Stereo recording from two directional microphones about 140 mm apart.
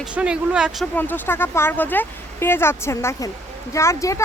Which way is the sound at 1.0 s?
15° left (ahead or behind).